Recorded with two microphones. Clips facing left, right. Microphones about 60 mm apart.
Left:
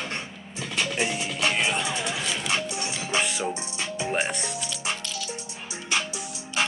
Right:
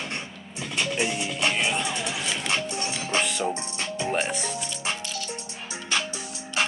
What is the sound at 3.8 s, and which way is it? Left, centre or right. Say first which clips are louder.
Music: left 1 dB; centre.